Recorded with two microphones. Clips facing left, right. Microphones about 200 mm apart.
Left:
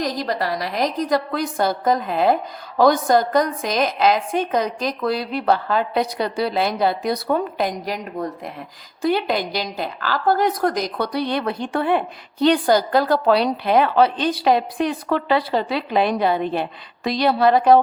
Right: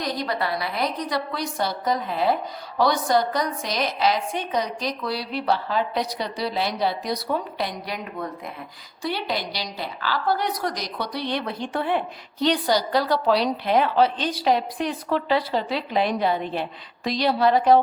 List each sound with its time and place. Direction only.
0.3 s a woman's voice: 40° left (ahead or behind); by 11.9 s 60° left (ahead or behind)
12.6 s a woman's voice: 50° left (ahead or behind)